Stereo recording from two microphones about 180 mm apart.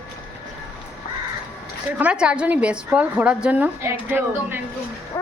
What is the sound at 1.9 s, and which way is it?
A woman's voice, 5° right (ahead or behind).